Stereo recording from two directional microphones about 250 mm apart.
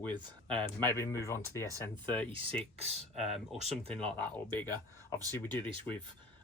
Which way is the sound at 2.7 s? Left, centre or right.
Right.